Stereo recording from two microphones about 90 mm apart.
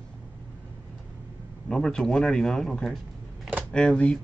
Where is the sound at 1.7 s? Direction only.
5° left (ahead or behind).